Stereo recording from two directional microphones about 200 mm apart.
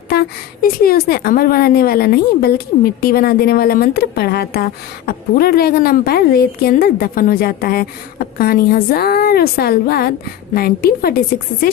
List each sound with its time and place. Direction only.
0.1 s a woman's voice: 50° left (ahead or behind)